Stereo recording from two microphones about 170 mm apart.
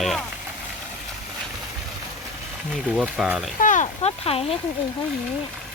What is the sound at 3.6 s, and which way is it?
Speech, 45° left (ahead or behind).